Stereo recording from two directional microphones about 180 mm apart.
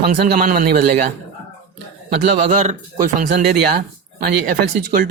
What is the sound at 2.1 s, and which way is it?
Speech, 40° right (ahead or behind).